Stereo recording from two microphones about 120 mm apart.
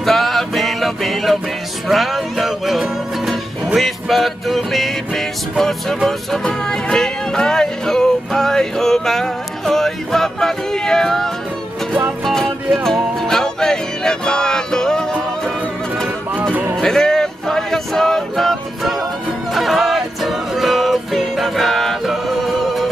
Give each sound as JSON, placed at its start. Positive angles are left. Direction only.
{"t": 0.0, "sound": "music", "side_deg": 0}
{"t": 16.8, "sound": "a sound", "side_deg": 5}
{"t": 19.5, "sound": "music", "side_deg": 0}